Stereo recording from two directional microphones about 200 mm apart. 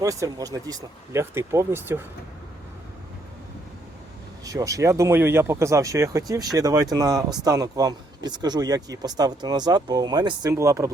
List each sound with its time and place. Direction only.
0.0 s speech: 15° right (ahead or behind)
4.4 s speech: 15° right (ahead or behind)